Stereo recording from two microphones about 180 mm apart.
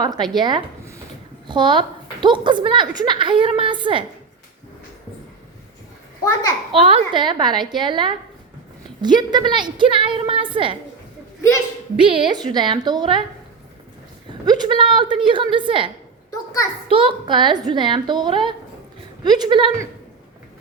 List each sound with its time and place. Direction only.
0.0 s a woman's voice: 25° right (ahead or behind)
6.8 s a woman's voice: 30° right (ahead or behind)
11.9 s a woman's voice: 30° right (ahead or behind)
14.4 s a woman's voice: 25° right (ahead or behind)
16.9 s a woman's voice: 30° right (ahead or behind)